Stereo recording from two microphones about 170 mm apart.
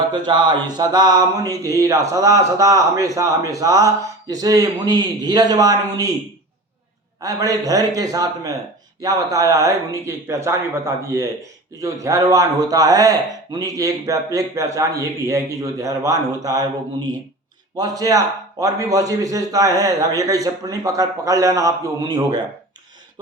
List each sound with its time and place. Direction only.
0.3 s speech: 25° right (ahead or behind)
7.2 s speech: 20° right (ahead or behind)